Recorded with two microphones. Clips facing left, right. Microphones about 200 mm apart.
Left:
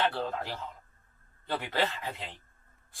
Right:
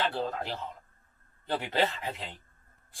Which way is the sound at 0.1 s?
20° right (ahead or behind).